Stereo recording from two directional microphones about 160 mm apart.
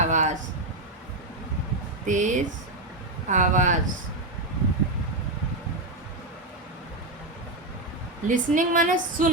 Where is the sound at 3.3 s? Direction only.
50° right (ahead or behind).